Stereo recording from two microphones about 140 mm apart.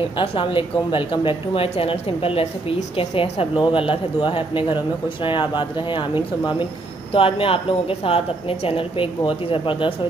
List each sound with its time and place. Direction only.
0.2 s a woman's voice: 40° left (ahead or behind)
7.1 s a woman's voice: 40° left (ahead or behind)